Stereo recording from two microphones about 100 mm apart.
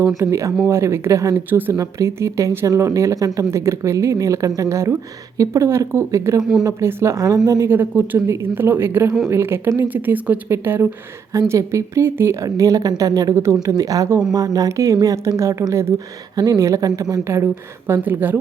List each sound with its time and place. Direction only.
0.2 s speech: 30° right (ahead or behind)
1.5 s speech: 20° right (ahead or behind)
1.7 s speech: 35° right (ahead or behind)
7.8 s speech: 20° right (ahead or behind); by 17.2 s 35° right (ahead or behind)
17.2 s speech: 25° right (ahead or behind)